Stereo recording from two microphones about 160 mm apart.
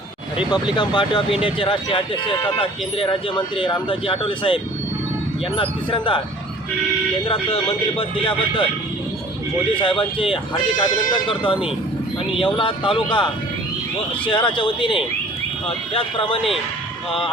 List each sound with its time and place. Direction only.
0.3 s speech: 30° left (ahead or behind)
7.3 s speech: 35° left (ahead or behind)
9.7 s speech: 30° left (ahead or behind)